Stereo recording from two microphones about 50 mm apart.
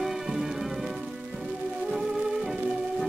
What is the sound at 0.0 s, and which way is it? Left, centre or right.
Music, centre.